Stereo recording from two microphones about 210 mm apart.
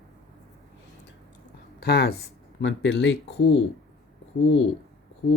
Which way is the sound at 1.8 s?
50° left (ahead or behind).